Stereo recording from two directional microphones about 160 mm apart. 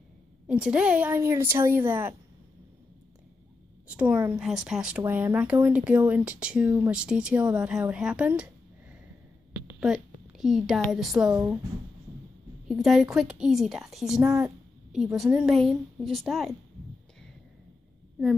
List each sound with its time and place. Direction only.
0.5 s speech: 5° right (ahead or behind)
3.8 s a woman's voice: 10° right (ahead or behind)
9.8 s a woman's voice: 5° right (ahead or behind)
12.6 s a woman's voice: centre (ahead or behind)
14.4 s a sound: 5° right (ahead or behind)
15.1 s a woman's voice: 5° right (ahead or behind)